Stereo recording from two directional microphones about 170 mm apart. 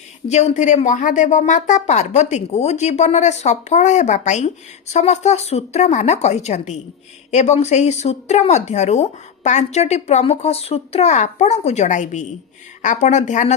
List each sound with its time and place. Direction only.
0.3 s speech: 40° left (ahead or behind)